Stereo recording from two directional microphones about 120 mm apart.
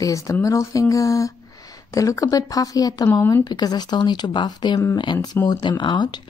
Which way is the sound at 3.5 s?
35° left (ahead or behind).